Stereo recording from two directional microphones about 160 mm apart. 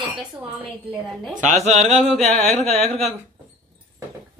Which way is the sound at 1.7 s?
40° right (ahead or behind).